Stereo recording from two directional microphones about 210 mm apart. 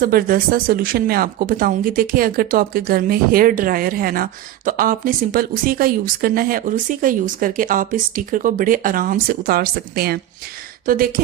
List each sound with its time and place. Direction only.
0.0 s speech: 45° right (ahead or behind)